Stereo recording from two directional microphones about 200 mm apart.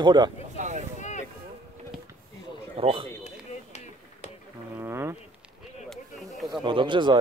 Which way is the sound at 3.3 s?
35° left (ahead or behind).